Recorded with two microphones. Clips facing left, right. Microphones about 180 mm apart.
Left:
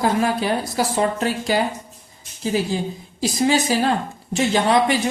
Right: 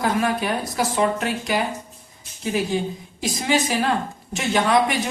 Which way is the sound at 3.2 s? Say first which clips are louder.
Left 3 dB; 35° left (ahead or behind).